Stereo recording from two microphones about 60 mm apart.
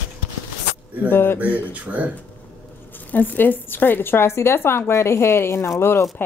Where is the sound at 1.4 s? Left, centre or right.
Right.